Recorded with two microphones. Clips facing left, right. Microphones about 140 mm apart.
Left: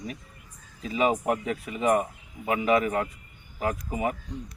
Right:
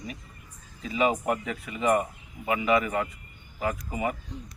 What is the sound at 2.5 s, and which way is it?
Speech, 40° left (ahead or behind).